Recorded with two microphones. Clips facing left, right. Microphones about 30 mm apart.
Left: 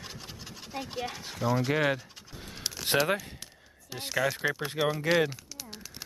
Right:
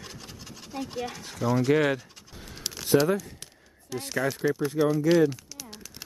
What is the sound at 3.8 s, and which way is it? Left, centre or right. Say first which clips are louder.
Speech: right 1 dB; left.